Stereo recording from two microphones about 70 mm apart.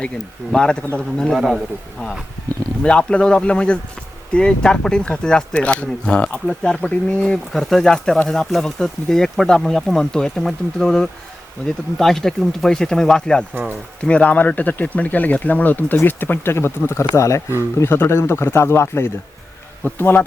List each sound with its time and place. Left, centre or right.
0.5 s speech: centre
1.3 s a man's voice: centre
2.8 s speech: centre